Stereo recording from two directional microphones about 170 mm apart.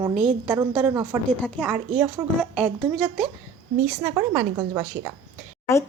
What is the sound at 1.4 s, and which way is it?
Speech, 5° left (ahead or behind).